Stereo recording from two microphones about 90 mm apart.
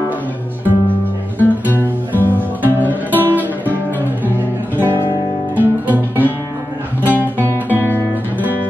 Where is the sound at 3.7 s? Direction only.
20° right (ahead or behind).